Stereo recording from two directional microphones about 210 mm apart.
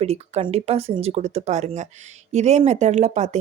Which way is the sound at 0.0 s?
30° right (ahead or behind).